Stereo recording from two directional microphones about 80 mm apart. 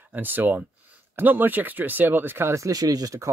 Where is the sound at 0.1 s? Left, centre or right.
Right.